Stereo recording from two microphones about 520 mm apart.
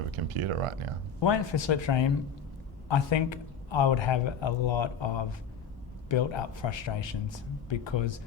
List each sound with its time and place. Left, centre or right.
0.3 s speech: right
1.2 s speech: left